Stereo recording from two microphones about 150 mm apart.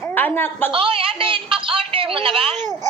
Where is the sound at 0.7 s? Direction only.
35° right (ahead or behind).